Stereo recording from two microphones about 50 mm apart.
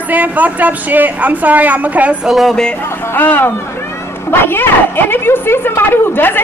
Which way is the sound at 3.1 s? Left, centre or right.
Left.